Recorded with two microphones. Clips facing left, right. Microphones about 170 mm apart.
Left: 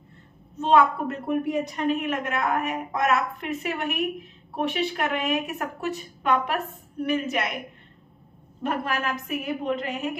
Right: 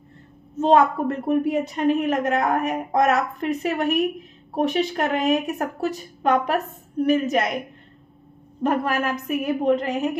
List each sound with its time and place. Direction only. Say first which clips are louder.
0.6 s speech: right 3 dB; 40° right (ahead or behind)
8.6 s speech: right 5 dB; 45° right (ahead or behind)